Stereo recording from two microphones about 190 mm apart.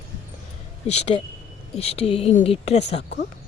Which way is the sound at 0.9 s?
35° left (ahead or behind).